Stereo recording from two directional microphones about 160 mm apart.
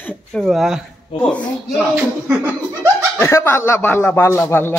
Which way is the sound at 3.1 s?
15° left (ahead or behind).